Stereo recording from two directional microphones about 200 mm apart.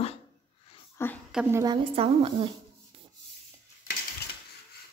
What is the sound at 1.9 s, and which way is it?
Speech, 30° right (ahead or behind).